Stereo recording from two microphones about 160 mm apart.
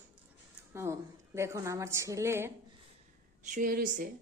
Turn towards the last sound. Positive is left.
turn(degrees=-60)  # may be behind; listen again after turning